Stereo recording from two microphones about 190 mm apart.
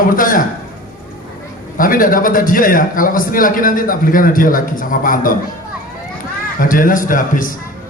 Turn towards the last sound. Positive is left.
turn(degrees=45)  # may be behind; listen again after turning